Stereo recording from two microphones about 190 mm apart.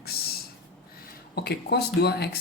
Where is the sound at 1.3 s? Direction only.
55° left (ahead or behind).